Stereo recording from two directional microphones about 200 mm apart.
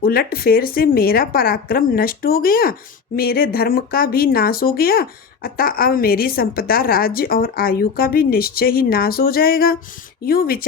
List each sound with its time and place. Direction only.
0.0 s speech: 50° left (ahead or behind)